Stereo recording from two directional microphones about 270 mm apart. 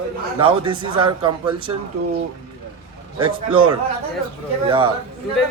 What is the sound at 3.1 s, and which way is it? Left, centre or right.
Speech, centre.